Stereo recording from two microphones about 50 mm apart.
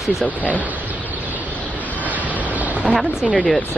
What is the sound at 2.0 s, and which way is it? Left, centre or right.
Vehicle, right.